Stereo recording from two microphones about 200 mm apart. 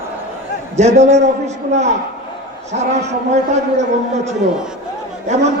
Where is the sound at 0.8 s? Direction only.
35° right (ahead or behind).